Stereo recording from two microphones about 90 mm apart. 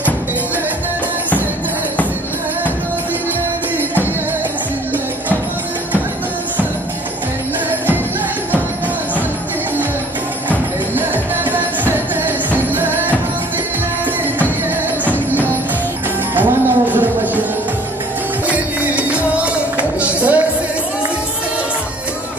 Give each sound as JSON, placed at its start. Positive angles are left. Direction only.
{"t": 11.5, "sound": "music", "side_deg": -20}
{"t": 16.3, "sound": "music", "side_deg": -20}
{"t": 18.5, "sound": "music", "side_deg": -15}